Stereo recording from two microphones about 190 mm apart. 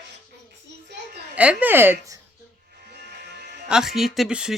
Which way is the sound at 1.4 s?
5° right (ahead or behind).